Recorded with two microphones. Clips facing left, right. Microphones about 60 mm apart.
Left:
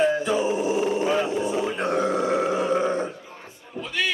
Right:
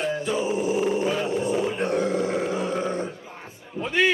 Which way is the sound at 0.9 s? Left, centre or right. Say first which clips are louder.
Left 1 dB; left.